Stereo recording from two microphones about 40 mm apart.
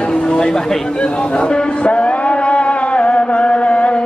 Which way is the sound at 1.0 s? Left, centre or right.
Left.